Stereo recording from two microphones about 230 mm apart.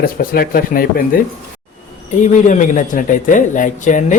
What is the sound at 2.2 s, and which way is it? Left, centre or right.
A man's voice, left.